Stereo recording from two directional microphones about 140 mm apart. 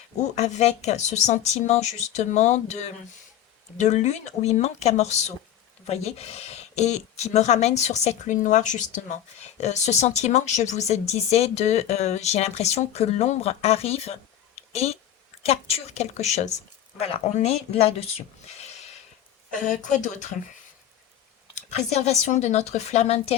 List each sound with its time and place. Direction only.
0.3 s speech: 55° left (ahead or behind)
17.0 s speech: 45° left (ahead or behind)
18.6 s a sound: 55° left (ahead or behind)
19.6 s speech: 65° left (ahead or behind)
21.5 s speech: 55° left (ahead or behind)